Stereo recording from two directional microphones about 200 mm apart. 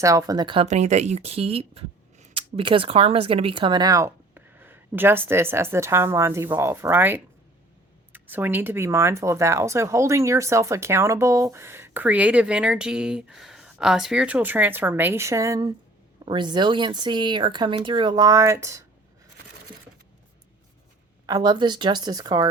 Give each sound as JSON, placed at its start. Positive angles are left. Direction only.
{"t": 0.0, "sound": "speech", "side_deg": -15}
{"t": 21.2, "sound": "speech", "side_deg": -20}